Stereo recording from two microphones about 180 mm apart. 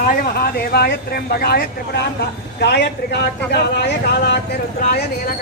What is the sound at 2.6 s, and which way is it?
Speech, 65° left (ahead or behind).